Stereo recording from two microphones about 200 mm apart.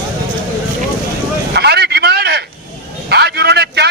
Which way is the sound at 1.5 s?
55° right (ahead or behind).